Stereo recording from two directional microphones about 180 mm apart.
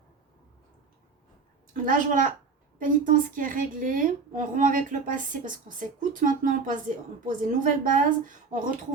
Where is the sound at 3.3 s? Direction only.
50° right (ahead or behind).